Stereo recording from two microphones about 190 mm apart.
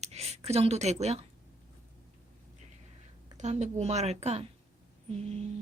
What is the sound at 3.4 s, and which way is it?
A woman's voice, 35° right (ahead or behind).